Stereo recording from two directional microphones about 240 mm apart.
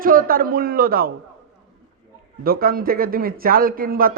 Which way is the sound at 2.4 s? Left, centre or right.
Right.